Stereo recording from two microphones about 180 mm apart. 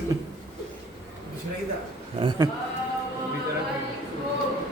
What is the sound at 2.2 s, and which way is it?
Speech, 30° right (ahead or behind).